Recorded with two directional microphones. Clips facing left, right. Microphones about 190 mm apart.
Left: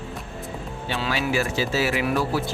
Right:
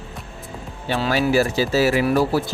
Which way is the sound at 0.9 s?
40° right (ahead or behind).